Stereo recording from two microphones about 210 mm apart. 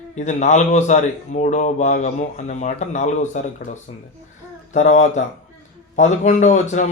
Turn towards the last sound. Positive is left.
turn(degrees=35)  # may be behind; listen again after turning